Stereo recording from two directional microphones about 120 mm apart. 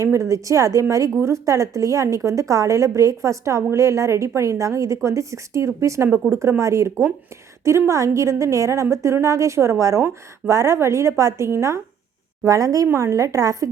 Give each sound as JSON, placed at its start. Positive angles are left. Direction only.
{"t": 0.0, "sound": "a woman's voice", "side_deg": -25}